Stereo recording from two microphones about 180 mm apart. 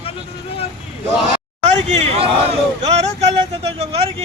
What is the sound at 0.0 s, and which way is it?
Vehicle, 30° left (ahead or behind).